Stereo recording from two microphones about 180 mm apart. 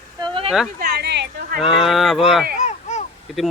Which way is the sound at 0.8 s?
60° right (ahead or behind).